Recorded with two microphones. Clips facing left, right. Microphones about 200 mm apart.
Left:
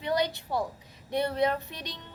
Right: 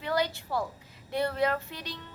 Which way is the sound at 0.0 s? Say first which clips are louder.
Left 1 dB; 20° left (ahead or behind).